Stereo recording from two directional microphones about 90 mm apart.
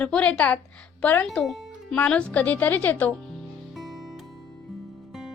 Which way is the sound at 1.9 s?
15° left (ahead or behind).